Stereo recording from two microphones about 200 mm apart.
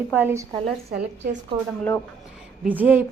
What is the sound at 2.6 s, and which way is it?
Speech, 10° right (ahead or behind).